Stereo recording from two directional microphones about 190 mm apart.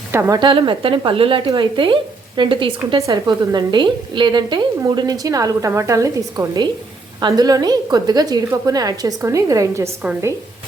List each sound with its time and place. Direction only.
0.1 s a woman's voice: 15° right (ahead or behind)